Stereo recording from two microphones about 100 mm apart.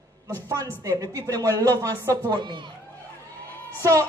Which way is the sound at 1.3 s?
35° right (ahead or behind).